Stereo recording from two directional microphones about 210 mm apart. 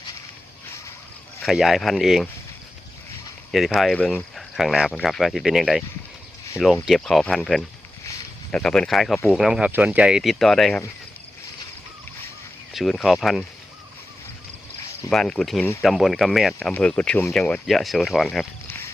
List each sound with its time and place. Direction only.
1.4 s speech: centre (ahead or behind)
3.5 s speech: centre (ahead or behind)
6.8 s speech: centre (ahead or behind)
12.7 s speech: centre (ahead or behind)
15.1 s speech: 5° left (ahead or behind)